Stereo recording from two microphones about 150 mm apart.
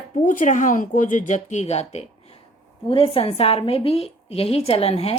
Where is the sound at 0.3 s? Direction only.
60° left (ahead or behind).